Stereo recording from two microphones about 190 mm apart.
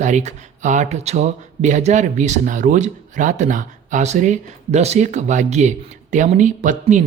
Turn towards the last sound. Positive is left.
turn(degrees=-40)  # may be behind; listen again after turning